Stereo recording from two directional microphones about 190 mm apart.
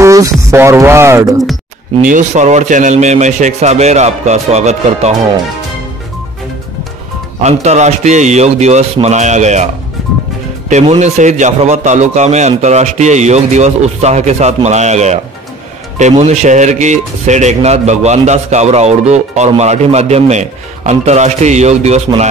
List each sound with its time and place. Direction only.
0.0 s speech: 15° right (ahead or behind)
2.0 s speech: 40° right (ahead or behind)
7.4 s speech: 35° right (ahead or behind)
10.7 s speech: 35° right (ahead or behind)